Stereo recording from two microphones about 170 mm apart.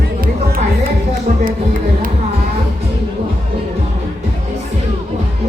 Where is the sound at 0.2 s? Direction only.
55° right (ahead or behind).